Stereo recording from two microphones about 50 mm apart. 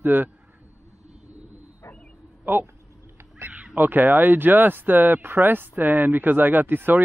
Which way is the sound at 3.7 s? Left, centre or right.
Right.